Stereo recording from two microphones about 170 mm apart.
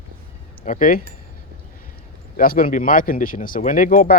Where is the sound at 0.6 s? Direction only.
50° left (ahead or behind).